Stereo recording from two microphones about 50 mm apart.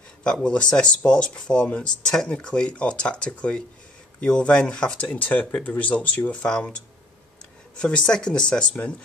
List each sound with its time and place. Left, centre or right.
0.2 s speech: centre
7.7 s speech: centre